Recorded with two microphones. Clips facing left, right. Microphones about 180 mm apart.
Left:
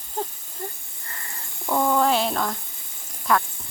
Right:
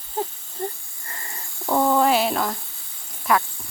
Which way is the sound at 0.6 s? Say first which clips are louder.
Right 6 dB; 25° right (ahead or behind).